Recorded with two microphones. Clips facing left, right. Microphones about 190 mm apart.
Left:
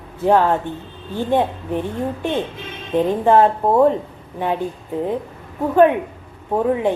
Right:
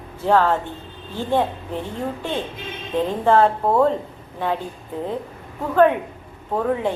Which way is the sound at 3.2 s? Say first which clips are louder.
Left 1 dB; 15° left (ahead or behind).